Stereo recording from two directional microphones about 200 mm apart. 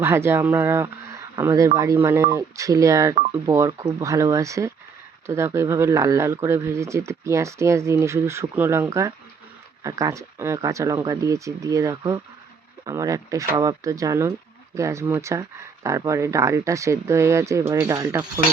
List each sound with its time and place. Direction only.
0.0 s speech: 10° right (ahead or behind)